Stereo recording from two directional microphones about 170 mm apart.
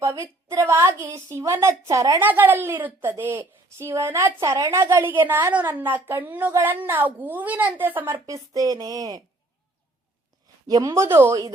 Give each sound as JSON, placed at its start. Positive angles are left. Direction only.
{"t": 0.2, "sound": "a woman's voice", "side_deg": -15}
{"t": 10.7, "sound": "a woman's voice", "side_deg": -20}